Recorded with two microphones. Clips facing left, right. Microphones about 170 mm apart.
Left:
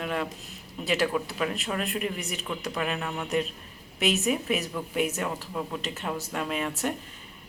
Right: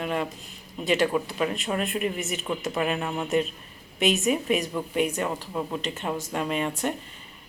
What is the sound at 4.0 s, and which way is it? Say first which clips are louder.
Speech: right 2 dB; centre (ahead or behind).